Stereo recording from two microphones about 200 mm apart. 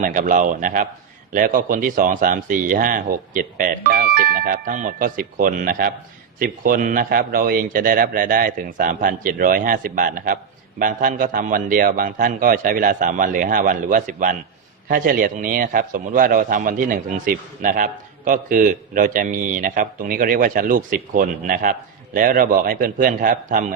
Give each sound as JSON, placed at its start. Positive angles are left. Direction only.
{"t": 0.0, "sound": "a man's voice", "side_deg": -40}